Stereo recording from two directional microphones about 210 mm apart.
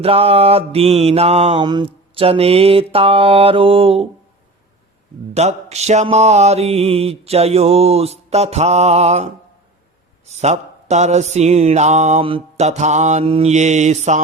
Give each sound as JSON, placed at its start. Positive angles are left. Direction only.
{"t": 0.0, "sound": "mantra", "side_deg": -30}
{"t": 5.3, "sound": "mantra", "side_deg": -30}